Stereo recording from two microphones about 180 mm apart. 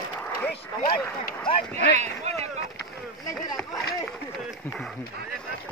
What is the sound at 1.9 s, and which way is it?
Speech, 35° right (ahead or behind).